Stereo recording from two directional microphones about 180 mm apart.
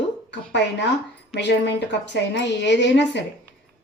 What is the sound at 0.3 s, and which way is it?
A woman's voice, 75° left (ahead or behind).